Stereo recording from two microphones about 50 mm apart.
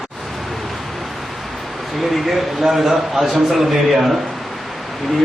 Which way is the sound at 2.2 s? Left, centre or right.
Centre.